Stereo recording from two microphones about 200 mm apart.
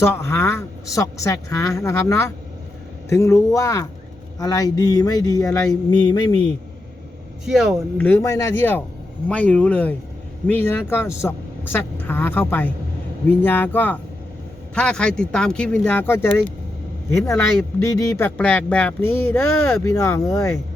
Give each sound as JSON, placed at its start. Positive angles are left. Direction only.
{"t": 0.0, "sound": "a man's voice", "side_deg": 15}
{"t": 7.4, "sound": "speech", "side_deg": 0}
{"t": 7.9, "sound": "a man's voice", "side_deg": 10}